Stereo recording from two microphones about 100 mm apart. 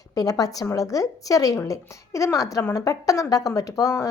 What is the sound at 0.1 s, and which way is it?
Speech, 40° left (ahead or behind).